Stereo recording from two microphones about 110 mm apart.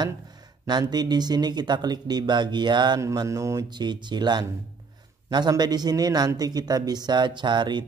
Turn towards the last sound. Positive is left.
turn(degrees=-45)  # may be behind; listen again after turning